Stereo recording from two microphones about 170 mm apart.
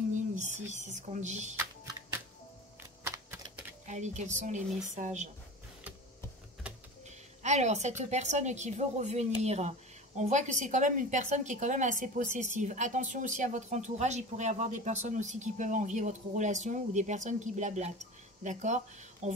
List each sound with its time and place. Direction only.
0.1 s speech: 45° right (ahead or behind)
3.8 s speech: 45° right (ahead or behind)
7.1 s speech: 45° right (ahead or behind)